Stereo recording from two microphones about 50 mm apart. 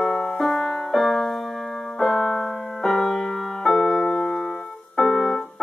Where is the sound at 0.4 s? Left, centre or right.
Centre.